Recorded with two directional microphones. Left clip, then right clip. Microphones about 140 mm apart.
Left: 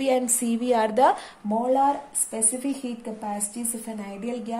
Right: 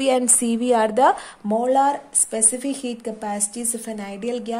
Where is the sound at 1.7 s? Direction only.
80° right.